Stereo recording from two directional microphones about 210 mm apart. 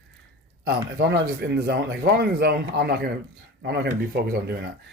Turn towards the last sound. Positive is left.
turn(degrees=-50)  # may be behind; listen again after turning